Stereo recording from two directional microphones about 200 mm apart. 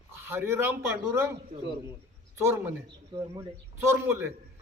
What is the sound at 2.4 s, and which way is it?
A man's voice, 15° right (ahead or behind).